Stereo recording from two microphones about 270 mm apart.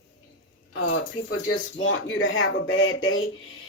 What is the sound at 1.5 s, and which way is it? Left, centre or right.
A woman's voice, left.